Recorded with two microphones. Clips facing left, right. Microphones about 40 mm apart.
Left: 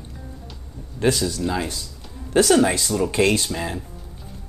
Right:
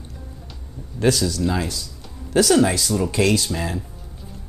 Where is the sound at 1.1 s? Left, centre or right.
Left.